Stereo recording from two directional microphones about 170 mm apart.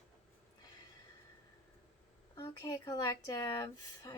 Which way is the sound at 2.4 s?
20° left (ahead or behind).